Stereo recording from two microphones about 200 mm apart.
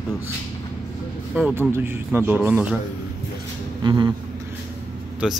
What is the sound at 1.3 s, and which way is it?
A man's voice, 10° right (ahead or behind).